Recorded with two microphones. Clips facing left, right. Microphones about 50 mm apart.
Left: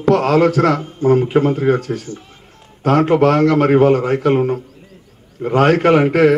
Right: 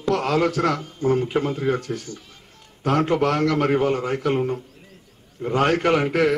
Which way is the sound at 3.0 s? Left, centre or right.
Left.